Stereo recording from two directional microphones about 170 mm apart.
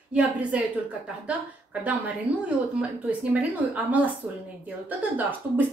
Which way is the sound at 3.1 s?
10° right (ahead or behind).